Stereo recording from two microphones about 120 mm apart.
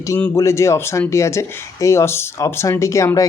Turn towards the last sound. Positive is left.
turn(degrees=25)  # may be behind; listen again after turning